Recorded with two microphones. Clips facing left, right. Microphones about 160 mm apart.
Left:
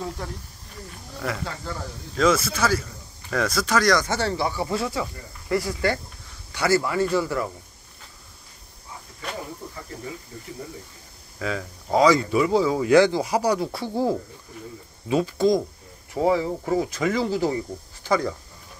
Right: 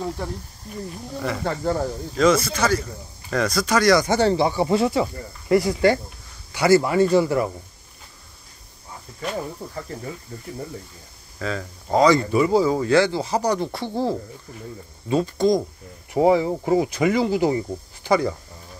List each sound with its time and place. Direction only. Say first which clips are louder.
1.4 s speech: right 10 dB; 50° right (ahead or behind)
2.1 s speech: right 2 dB; centre (ahead or behind)
4.0 s speech: right 6 dB; 15° right (ahead or behind)
11.3 s speech: right 1 dB; 5° left (ahead or behind)
12.8 s speech: left 2 dB; 15° left (ahead or behind)
16.1 s speech: right 4 dB; 20° right (ahead or behind)